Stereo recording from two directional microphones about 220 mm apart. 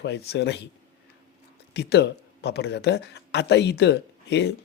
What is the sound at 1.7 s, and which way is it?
Speech, 50° left (ahead or behind).